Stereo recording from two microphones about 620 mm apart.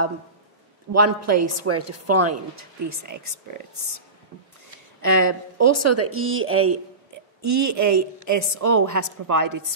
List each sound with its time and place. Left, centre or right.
0.9 s a woman's voice: right
5.0 s a woman's voice: right